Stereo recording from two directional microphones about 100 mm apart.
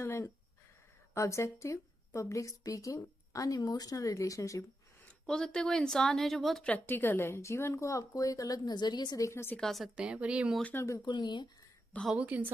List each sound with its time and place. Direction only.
0.0 s a woman's voice: 25° left (ahead or behind)
5.2 s a woman's voice: 10° left (ahead or behind)
6.7 s a woman's voice: 20° left (ahead or behind)
9.6 s a woman's voice: centre (ahead or behind)
9.9 s speech: 10° right (ahead or behind)
10.6 s speech: 20° left (ahead or behind)
11.0 s speech: 50° left (ahead or behind)
12.2 s speech: 15° right (ahead or behind)